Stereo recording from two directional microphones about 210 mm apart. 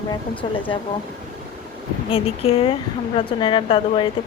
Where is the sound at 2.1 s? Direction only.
25° left (ahead or behind).